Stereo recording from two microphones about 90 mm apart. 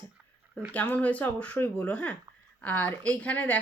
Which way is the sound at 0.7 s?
15° left (ahead or behind).